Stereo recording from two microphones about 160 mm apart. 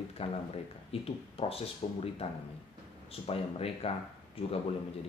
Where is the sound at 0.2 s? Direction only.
40° left (ahead or behind).